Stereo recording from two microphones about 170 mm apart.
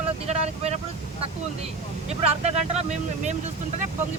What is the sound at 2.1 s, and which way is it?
Speech, 40° right (ahead or behind).